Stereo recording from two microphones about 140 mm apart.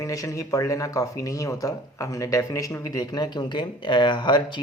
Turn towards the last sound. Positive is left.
turn(degrees=35)  # may be behind; listen again after turning